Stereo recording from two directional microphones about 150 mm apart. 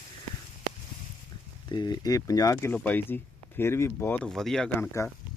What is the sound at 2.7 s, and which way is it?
Speech, 10° left (ahead or behind).